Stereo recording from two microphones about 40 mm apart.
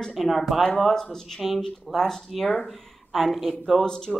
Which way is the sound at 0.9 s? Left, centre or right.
Centre.